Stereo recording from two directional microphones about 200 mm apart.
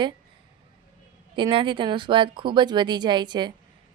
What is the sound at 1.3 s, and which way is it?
Speech, 25° right (ahead or behind).